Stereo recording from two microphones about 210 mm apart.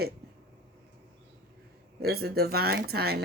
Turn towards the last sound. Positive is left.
turn(degrees=-50)  # may be behind; listen again after turning